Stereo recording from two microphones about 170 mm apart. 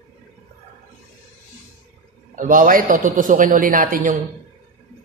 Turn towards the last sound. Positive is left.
turn(degrees=-55)  # may be behind; listen again after turning